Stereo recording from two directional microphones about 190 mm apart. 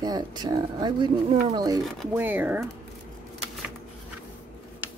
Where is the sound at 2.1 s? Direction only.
10° right (ahead or behind).